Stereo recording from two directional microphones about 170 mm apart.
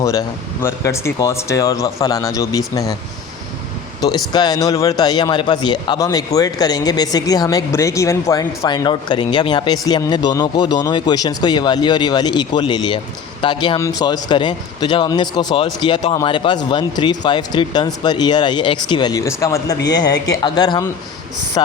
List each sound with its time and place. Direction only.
0.0 s a man's voice: 20° left (ahead or behind)
4.3 s a man's voice: 25° left (ahead or behind)